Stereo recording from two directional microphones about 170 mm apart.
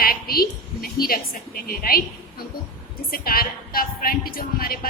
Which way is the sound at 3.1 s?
60° left (ahead or behind).